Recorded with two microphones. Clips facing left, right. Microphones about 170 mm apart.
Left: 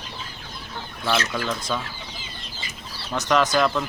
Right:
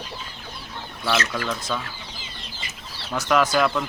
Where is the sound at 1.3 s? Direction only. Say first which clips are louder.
Left 1 dB; 5° left (ahead or behind).